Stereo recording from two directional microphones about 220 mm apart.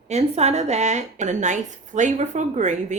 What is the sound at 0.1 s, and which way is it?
A woman's voice, 30° right (ahead or behind).